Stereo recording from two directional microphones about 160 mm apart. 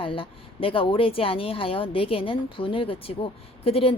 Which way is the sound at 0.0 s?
35° left (ahead or behind).